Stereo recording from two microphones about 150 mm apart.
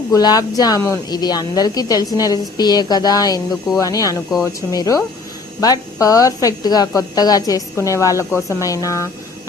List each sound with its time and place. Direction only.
0.1 s a woman's voice: 25° left (ahead or behind)